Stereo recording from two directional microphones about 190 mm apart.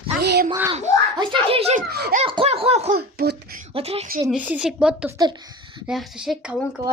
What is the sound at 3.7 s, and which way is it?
Speech, 30° right (ahead or behind).